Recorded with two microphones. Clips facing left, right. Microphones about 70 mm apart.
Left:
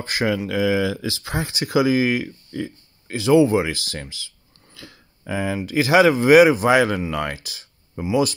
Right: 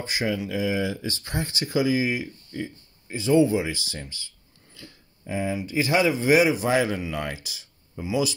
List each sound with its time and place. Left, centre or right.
0.0 s speech: left
4.7 s a sound: left
5.7 s speech: left
7.0 s speech: left